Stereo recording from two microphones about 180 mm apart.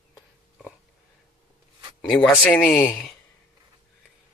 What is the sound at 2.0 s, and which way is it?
Speech, 5° left (ahead or behind).